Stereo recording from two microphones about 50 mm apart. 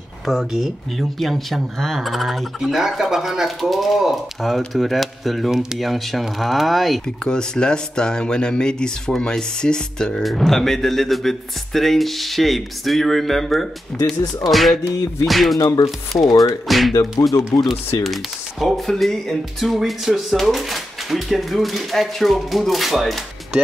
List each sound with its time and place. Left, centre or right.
0.5 s speech: centre
7.2 s speech: centre
10.2 s speech: centre
17.2 s speech: left
17.6 s speech: centre